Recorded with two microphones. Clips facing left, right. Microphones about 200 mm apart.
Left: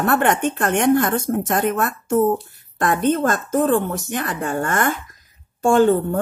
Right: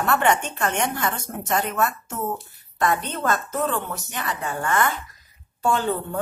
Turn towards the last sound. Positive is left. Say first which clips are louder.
# left 9 dB
turn(degrees=50)  # may be behind; listen again after turning